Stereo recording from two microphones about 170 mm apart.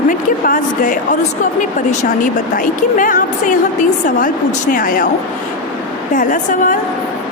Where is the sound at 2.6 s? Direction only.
50° left (ahead or behind).